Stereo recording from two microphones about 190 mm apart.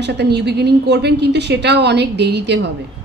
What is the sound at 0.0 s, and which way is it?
A woman's voice, 60° right (ahead or behind).